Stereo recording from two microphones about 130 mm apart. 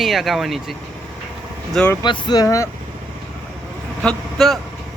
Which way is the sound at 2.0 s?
35° left (ahead or behind).